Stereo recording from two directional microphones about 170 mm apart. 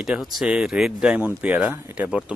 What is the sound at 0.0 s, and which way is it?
A man's voice, centre (ahead or behind).